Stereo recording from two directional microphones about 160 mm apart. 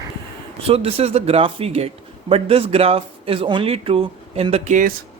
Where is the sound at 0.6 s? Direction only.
40° right (ahead or behind).